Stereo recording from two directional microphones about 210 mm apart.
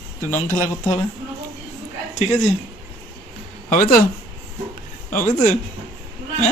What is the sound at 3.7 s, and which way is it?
Speech, 40° left (ahead or behind).